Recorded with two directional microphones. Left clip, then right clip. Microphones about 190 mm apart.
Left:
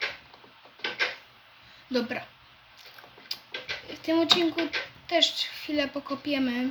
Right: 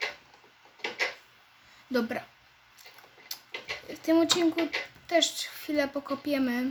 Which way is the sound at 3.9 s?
45° right (ahead or behind).